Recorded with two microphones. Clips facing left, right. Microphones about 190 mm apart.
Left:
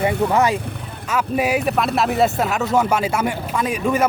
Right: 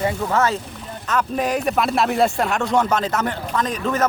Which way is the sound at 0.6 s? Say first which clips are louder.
Left 2 dB; 60° left (ahead or behind).